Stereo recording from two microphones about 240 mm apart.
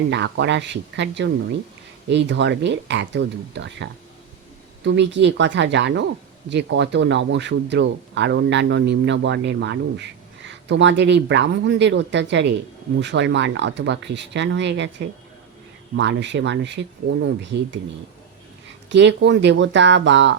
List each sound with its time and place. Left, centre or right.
0.1 s speech: right
18.9 s speech: right